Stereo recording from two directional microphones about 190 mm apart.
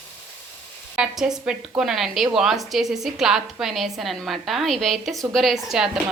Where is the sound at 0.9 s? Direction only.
5° right (ahead or behind).